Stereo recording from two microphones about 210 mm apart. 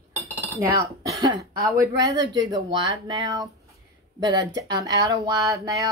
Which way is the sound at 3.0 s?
20° right (ahead or behind).